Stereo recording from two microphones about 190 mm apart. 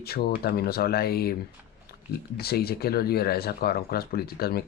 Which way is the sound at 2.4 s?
55° left (ahead or behind).